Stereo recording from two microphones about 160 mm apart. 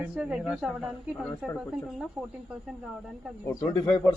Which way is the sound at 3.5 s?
20° left (ahead or behind).